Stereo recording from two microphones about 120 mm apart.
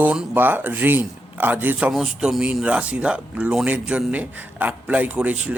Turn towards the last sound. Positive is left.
turn(degrees=-10)  # may be behind; listen again after turning